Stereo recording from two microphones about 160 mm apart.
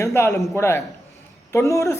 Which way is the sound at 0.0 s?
20° left (ahead or behind).